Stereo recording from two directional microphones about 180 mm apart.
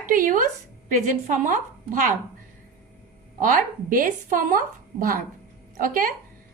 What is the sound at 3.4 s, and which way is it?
A woman's voice, 50° right (ahead or behind).